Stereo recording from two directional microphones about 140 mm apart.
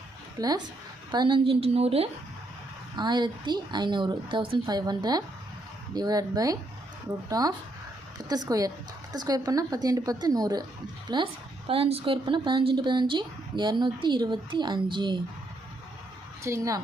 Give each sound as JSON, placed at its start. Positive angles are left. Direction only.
{"t": 0.3, "sound": "a woman's voice", "side_deg": -30}
{"t": 2.9, "sound": "a woman's voice", "side_deg": -30}
{"t": 11.7, "sound": "speech", "side_deg": -45}
{"t": 16.4, "sound": "a woman's voice", "side_deg": -25}